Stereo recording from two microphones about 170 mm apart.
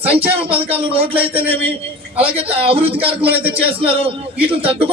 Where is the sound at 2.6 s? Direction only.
35° right (ahead or behind).